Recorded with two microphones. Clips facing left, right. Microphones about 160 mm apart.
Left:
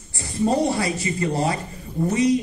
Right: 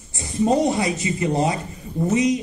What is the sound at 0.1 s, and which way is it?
A man's voice, 20° right (ahead or behind).